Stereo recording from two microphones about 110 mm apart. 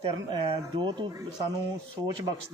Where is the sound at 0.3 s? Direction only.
50° right (ahead or behind).